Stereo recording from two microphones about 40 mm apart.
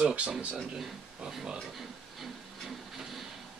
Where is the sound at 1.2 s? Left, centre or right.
Centre.